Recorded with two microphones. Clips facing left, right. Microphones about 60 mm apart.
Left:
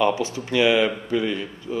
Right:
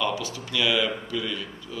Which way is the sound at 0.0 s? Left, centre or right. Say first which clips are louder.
Left 7 dB; left.